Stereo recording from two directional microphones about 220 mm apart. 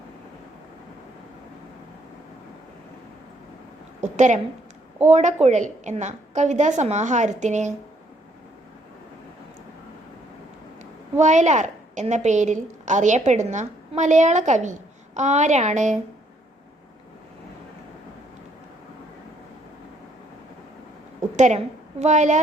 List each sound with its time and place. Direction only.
4.0 s a woman's voice: 35° right (ahead or behind)
11.2 s a woman's voice: 30° right (ahead or behind)
21.3 s a woman's voice: 30° right (ahead or behind)